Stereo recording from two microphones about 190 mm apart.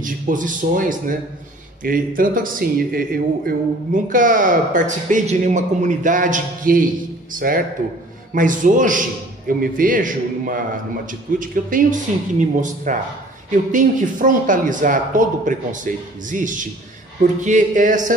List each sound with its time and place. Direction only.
0.0 s speech: 45° right (ahead or behind)